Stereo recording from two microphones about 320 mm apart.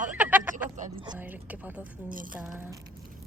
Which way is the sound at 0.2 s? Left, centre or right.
Centre.